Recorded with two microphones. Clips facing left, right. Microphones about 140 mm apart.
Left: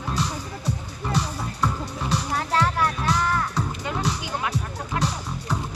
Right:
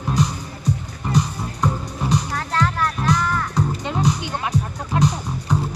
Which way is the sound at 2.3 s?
10° left (ahead or behind).